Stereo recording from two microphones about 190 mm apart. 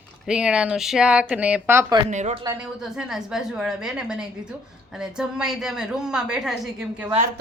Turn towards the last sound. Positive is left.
turn(degrees=-5)  # may be behind; listen again after turning